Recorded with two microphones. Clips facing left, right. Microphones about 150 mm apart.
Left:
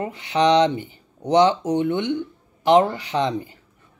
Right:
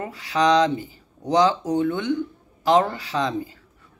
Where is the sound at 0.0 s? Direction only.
25° left (ahead or behind).